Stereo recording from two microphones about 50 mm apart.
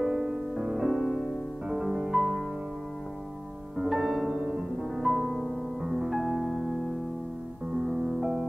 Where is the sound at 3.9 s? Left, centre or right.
Centre.